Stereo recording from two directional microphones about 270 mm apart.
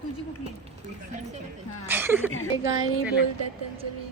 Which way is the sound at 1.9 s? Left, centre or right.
Centre.